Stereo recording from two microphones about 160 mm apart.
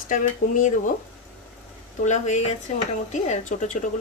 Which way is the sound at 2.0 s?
45° left (ahead or behind).